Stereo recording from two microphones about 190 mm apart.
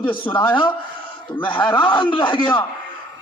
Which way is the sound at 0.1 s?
25° left (ahead or behind).